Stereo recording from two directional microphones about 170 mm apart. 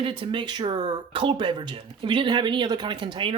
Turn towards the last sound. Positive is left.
turn(degrees=-30)  # may be behind; listen again after turning